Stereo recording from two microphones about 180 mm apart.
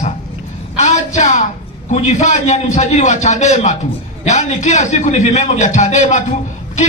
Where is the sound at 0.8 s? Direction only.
40° left (ahead or behind).